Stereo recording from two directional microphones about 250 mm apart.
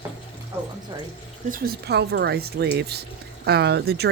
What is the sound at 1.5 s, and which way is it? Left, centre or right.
Speech, right.